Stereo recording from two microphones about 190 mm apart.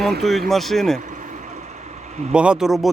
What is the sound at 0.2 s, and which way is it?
Speech, centre (ahead or behind).